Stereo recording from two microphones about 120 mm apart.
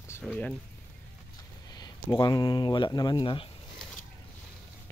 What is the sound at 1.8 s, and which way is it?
Speech, 35° left (ahead or behind).